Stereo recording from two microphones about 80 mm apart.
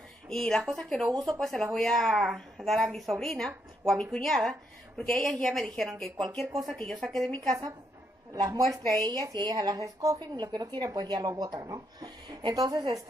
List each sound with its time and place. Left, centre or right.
0.3 s a woman's voice: centre
8.4 s speech: right
10.1 s speech: right